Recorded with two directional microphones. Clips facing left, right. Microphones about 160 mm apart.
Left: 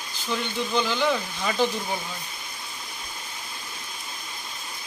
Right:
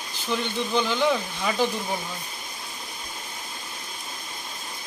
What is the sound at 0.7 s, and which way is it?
Speech, 15° right (ahead or behind).